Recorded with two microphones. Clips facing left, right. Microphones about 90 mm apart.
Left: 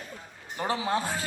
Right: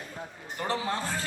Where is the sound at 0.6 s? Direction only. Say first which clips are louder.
Left 2 dB; 10° left (ahead or behind).